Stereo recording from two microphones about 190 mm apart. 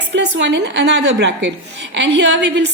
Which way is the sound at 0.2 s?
65° right (ahead or behind).